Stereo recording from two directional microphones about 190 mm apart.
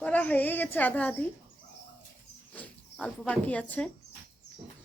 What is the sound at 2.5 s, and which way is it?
Speech, 5° left (ahead or behind).